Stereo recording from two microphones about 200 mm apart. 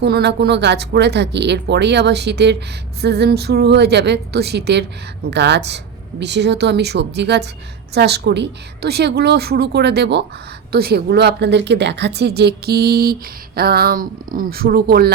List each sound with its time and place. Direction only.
0.0 s speech: 55° right (ahead or behind)